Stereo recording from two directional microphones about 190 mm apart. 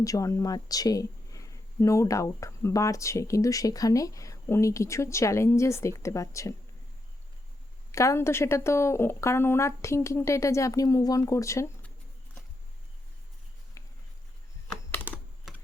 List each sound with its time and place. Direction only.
0.0 s speech: 15° left (ahead or behind)
7.9 s speech: 15° left (ahead or behind)
13.8 s a sound: 15° left (ahead or behind)
15.5 s typing: centre (ahead or behind)